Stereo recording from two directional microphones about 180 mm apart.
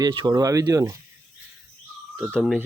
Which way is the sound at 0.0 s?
25° right (ahead or behind).